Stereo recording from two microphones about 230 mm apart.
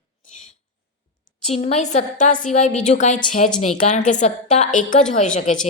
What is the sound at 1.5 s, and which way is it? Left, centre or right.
Speech, left.